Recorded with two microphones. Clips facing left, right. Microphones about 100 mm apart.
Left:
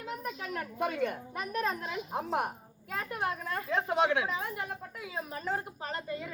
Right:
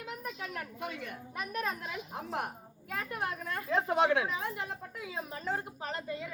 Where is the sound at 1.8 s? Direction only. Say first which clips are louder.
Left 5 dB; 25° left (ahead or behind).